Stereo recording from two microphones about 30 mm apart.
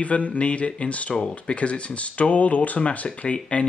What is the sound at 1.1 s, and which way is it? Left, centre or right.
Speech, left.